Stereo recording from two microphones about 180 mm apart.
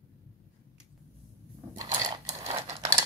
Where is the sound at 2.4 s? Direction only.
35° right (ahead or behind).